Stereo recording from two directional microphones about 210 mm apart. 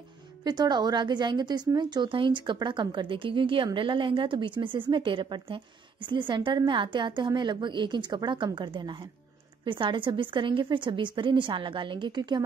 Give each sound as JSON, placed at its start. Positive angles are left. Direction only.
{"t": 0.4, "sound": "a woman's voice", "side_deg": -20}